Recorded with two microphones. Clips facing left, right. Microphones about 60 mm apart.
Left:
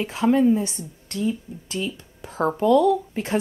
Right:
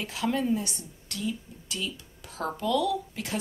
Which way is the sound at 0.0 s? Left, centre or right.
Left.